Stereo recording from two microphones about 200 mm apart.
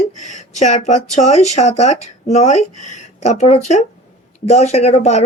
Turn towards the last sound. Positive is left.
turn(degrees=30)  # may be behind; listen again after turning